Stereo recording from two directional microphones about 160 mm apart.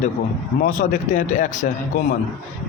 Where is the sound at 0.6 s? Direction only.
55° left (ahead or behind).